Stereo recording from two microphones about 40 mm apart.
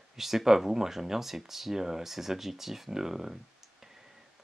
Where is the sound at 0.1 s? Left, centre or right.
Centre.